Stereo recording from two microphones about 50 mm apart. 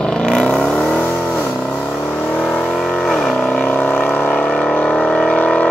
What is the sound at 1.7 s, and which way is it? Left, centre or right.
Vehicle, centre.